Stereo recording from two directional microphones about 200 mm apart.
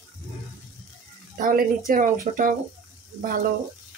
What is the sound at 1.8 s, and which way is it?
Speech, 40° right (ahead or behind).